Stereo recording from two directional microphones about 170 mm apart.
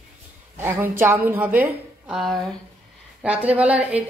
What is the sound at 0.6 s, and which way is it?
A woman's voice, 15° right (ahead or behind).